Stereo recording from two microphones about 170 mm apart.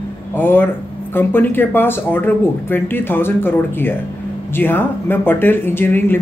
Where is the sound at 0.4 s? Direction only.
10° left (ahead or behind).